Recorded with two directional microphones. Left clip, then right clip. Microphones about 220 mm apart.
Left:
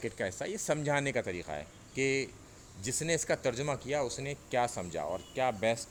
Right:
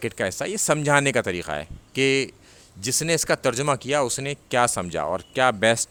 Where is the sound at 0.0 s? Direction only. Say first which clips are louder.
Right 10 dB; 35° right (ahead or behind).